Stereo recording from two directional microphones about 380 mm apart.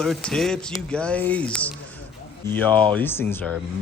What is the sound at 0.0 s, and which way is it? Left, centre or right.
Speech, centre.